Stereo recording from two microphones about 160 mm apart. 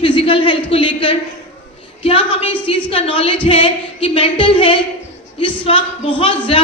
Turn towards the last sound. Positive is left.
turn(degrees=35)  # may be behind; listen again after turning